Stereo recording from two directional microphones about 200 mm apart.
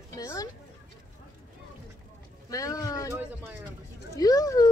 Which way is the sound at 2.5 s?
15° left (ahead or behind).